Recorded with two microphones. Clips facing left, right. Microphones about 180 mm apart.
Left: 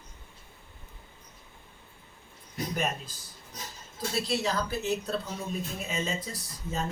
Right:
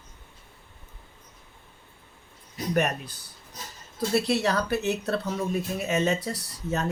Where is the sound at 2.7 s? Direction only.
65° right (ahead or behind).